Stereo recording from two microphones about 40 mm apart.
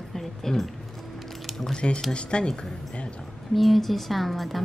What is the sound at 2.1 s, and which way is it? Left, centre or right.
Speech, left.